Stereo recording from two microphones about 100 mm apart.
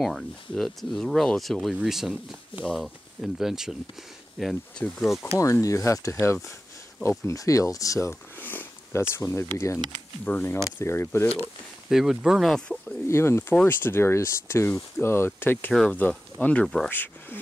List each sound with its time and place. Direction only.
0.0 s speech: centre (ahead or behind)
5.4 s speech: 35° left (ahead or behind)
8.4 s a sound: 20° left (ahead or behind)
9.1 s speech: 25° left (ahead or behind)
11.9 s speech: 5° right (ahead or behind)
13.1 s speech: 25° left (ahead or behind)
15.7 s speech: 5° left (ahead or behind)
16.9 s speech: 20° left (ahead or behind)